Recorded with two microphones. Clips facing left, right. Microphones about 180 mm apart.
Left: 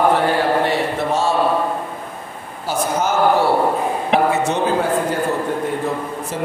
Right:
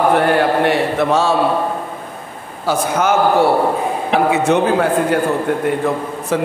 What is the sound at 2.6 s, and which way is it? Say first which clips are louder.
Speech: right 3 dB; 65° right (ahead or behind).